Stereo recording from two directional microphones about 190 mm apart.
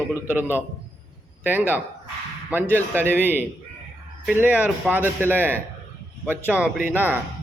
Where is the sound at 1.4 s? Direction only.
10° right (ahead or behind).